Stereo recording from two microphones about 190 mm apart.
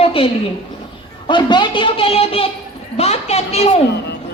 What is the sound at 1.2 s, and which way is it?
Speech, 25° left (ahead or behind).